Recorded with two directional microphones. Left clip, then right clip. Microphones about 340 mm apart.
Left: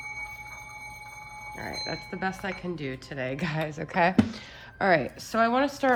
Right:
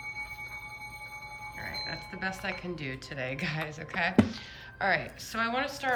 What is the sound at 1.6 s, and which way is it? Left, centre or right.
Speech, centre.